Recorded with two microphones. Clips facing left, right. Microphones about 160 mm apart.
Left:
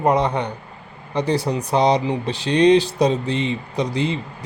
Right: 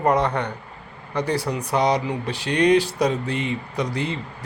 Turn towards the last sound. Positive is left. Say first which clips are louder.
# left 4 dB
turn(degrees=20)  # may be behind; listen again after turning